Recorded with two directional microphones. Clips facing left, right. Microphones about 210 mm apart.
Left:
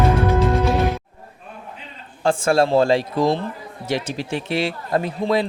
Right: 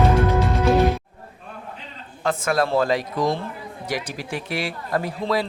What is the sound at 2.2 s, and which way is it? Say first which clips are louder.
Speech: left 5 dB; 30° left (ahead or behind).